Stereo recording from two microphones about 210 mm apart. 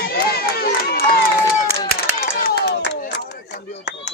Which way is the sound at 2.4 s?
50° left (ahead or behind).